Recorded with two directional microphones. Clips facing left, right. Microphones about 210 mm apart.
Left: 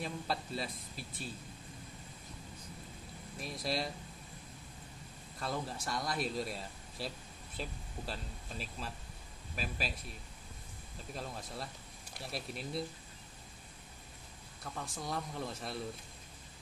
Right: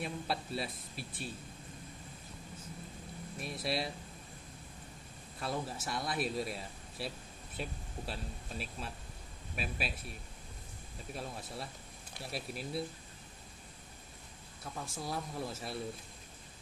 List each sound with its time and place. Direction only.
0.0 s speech: 5° right (ahead or behind)
3.3 s speech: 5° right (ahead or behind)
5.4 s speech: 5° right (ahead or behind)
8.1 s speech: 5° right (ahead or behind)
11.1 s speech: 5° right (ahead or behind)
14.6 s speech: 5° right (ahead or behind)